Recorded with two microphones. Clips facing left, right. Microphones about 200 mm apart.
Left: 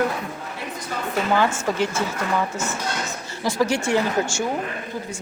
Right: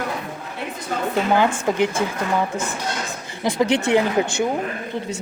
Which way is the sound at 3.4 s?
20° right (ahead or behind).